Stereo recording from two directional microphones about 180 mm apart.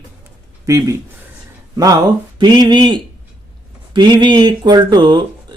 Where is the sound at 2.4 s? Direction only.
25° right (ahead or behind).